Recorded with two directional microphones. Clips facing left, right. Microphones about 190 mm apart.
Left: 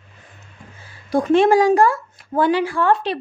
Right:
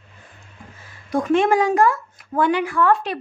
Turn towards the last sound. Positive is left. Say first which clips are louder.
# even
turn(degrees=30)  # may be behind; listen again after turning